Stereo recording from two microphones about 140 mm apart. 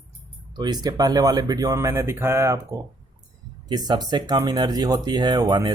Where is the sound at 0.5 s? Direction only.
30° right (ahead or behind).